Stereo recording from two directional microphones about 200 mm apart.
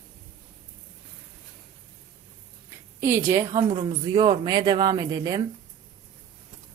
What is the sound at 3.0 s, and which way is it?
Speech, 10° right (ahead or behind).